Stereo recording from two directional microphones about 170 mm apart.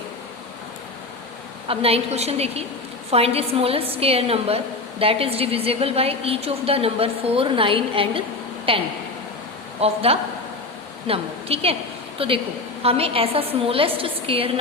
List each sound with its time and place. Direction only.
1.6 s a woman's voice: 35° right (ahead or behind)